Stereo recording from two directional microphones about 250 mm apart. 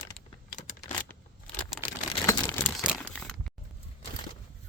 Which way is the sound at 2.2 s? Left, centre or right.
Centre.